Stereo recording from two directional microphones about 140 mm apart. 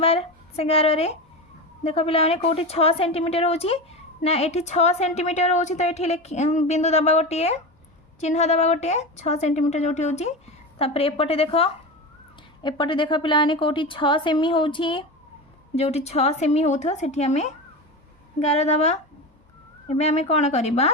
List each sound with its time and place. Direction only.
0.0 s a woman's voice: 45° left (ahead or behind)
15.7 s a woman's voice: 50° left (ahead or behind)